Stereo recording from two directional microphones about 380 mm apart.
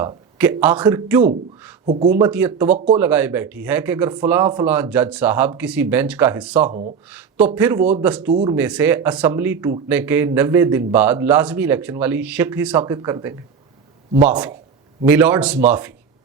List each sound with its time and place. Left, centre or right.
0.0 s a man's voice: centre
1.9 s speech: centre
2.7 s speech: centre
3.0 s a man's voice: centre
6.7 s speech: centre
7.1 s a man's voice: centre
8.3 s speech: centre
8.5 s a man's voice: centre